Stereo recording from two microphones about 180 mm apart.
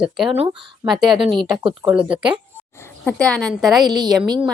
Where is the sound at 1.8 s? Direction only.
25° right (ahead or behind).